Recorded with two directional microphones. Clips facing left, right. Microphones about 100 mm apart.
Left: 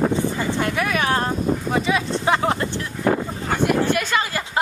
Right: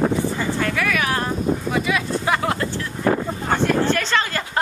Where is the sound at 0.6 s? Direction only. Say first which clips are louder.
Left 1 dB; 25° left (ahead or behind).